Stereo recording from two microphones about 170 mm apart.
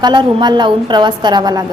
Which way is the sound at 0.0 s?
30° right (ahead or behind).